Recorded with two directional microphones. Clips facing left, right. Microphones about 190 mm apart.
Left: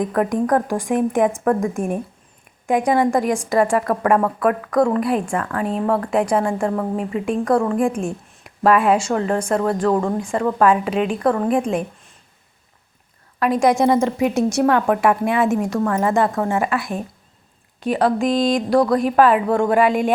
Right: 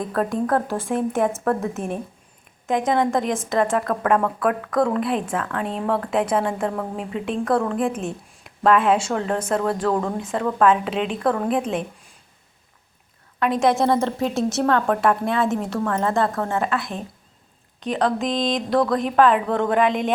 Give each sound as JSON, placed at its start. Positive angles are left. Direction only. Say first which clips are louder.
{"t": 0.0, "sound": "a woman's voice", "louder": "left 4 dB", "side_deg": 15}
{"t": 2.6, "sound": "a woman's voice", "louder": "left 3 dB", "side_deg": 0}
{"t": 13.4, "sound": "a woman's voice", "louder": "left 3 dB", "side_deg": 0}
{"t": 14.0, "sound": "a woman's voice", "louder": "left 4 dB", "side_deg": 15}